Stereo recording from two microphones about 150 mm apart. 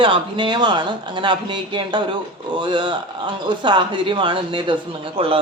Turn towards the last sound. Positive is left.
turn(degrees=-40)  # may be behind; listen again after turning